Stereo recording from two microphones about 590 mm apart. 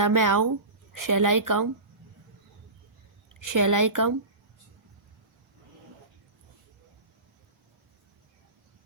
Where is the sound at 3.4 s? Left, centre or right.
Right.